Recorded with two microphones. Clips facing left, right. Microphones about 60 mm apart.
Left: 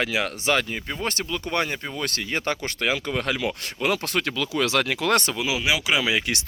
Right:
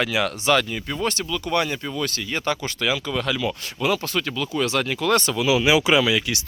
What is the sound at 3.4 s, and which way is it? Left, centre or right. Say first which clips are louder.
Speech: right 1 dB; left.